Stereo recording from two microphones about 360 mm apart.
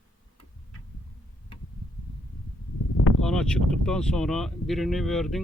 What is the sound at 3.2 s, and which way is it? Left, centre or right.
Speech, centre.